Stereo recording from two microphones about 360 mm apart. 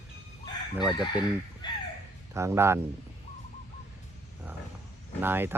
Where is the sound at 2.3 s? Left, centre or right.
Centre.